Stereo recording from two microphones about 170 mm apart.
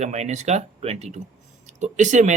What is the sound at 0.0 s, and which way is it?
Speech, 40° right (ahead or behind).